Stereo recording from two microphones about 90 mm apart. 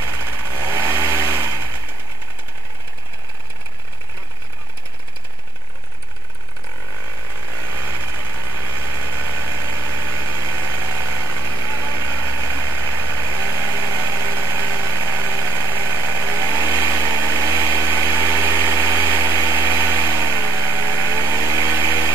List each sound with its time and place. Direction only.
0.0 s vehicle: 25° right (ahead or behind)
7.6 s vehicle: 25° right (ahead or behind)
16.8 s a sound: 30° right (ahead or behind)
17.7 s engine: 30° right (ahead or behind)
19.3 s vehicle: 25° right (ahead or behind)